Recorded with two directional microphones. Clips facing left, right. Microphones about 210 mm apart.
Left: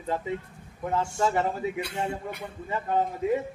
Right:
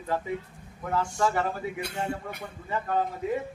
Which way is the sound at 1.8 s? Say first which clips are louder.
Left 1 dB; 45° right (ahead or behind).